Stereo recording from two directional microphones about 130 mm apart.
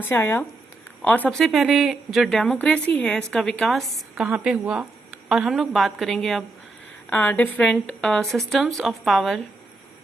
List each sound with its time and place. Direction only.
0.0 s a woman's voice: 15° left (ahead or behind); by 9.4 s centre (ahead or behind)